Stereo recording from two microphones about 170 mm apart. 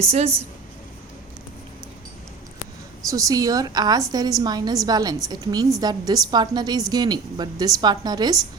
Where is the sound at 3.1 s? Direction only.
20° right (ahead or behind).